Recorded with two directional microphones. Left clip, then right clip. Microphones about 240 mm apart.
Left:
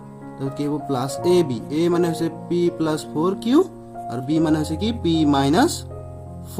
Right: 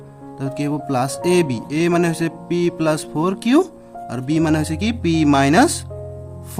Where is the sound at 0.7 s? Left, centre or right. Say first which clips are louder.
Right 4 dB; right.